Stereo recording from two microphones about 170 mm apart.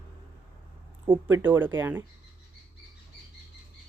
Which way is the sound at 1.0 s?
10° right (ahead or behind).